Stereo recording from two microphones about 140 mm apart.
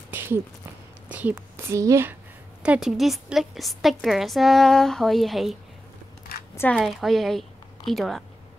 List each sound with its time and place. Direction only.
0.1 s speech: 15° right (ahead or behind)
2.6 s a woman's voice: 5° right (ahead or behind)
6.7 s a woman's voice: centre (ahead or behind)